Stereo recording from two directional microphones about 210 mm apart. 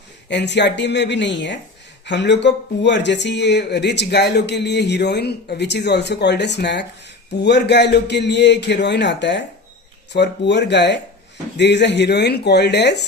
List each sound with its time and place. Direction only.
0.3 s a man's voice: 55° left (ahead or behind)